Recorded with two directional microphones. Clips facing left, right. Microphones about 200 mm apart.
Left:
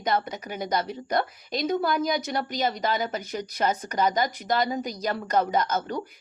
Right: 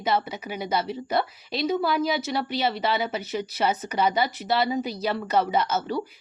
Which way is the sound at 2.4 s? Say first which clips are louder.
Right 1 dB; 40° left (ahead or behind).